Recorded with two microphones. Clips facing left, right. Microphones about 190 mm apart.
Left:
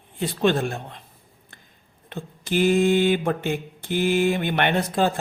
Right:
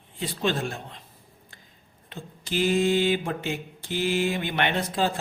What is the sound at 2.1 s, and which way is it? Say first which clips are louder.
Mantra: left 5 dB; 55° left (ahead or behind).